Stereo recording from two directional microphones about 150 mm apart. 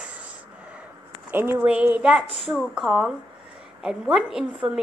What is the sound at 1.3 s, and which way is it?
A woman's voice, 15° right (ahead or behind).